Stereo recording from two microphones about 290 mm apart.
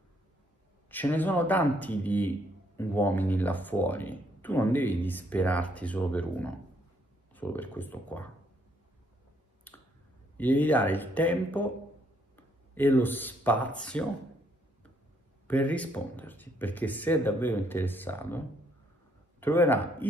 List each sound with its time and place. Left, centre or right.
0.8 s speech: centre
9.7 s finger snapping: centre
10.3 s speech: centre
15.4 s speech: centre
19.4 s speech: centre